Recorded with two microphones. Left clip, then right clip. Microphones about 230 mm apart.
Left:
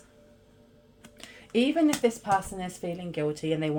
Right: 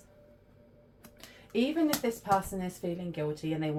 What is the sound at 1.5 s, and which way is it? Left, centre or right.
Speech, left.